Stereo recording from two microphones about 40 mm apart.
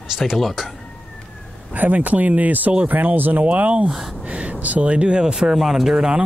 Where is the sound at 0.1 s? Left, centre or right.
Centre.